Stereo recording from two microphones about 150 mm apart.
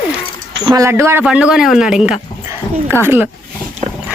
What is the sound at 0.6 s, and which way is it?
Speech, 25° right (ahead or behind).